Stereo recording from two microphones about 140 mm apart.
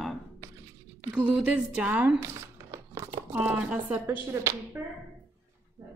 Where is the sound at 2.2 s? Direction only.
20° right (ahead or behind).